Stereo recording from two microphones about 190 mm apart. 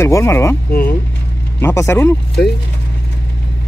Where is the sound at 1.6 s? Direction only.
15° left (ahead or behind).